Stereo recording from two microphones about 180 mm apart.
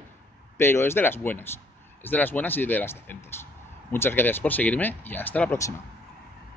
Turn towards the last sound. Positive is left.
turn(degrees=10)  # may be behind; listen again after turning